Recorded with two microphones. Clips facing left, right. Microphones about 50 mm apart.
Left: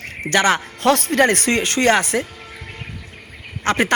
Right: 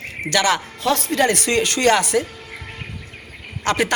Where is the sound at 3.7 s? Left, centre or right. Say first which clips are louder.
Left 1 dB; left.